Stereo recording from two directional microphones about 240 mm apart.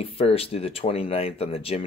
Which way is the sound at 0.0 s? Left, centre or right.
Left.